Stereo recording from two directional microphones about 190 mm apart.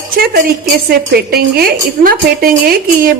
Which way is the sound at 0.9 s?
55° right (ahead or behind).